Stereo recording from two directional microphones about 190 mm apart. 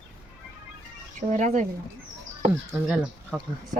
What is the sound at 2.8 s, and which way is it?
Speech, centre (ahead or behind).